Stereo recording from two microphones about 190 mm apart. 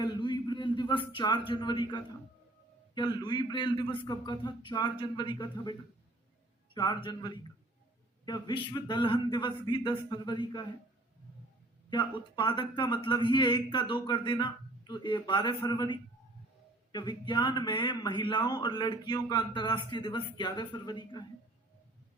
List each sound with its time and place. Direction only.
0.0 s a sound: 25° left (ahead or behind)
2.9 s a man's voice: 25° left (ahead or behind)
6.7 s a man's voice: 20° left (ahead or behind)
11.9 s a man's voice: 25° left (ahead or behind)